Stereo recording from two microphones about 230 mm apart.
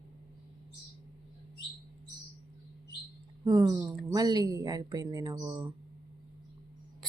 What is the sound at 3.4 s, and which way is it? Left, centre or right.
Speech, centre.